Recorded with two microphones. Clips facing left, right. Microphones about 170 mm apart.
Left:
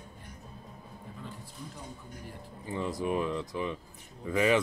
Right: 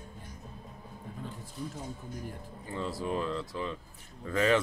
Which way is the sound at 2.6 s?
15° left (ahead or behind).